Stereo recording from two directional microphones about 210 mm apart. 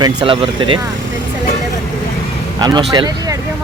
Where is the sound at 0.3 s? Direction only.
25° right (ahead or behind).